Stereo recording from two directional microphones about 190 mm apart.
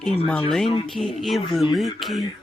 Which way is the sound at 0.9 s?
Centre (ahead or behind).